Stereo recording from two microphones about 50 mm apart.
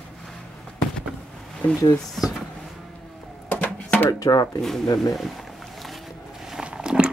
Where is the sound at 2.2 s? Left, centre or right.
Centre.